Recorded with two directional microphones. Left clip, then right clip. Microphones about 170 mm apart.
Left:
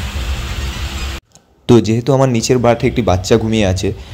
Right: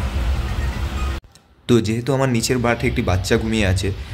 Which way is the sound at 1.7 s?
25° left (ahead or behind).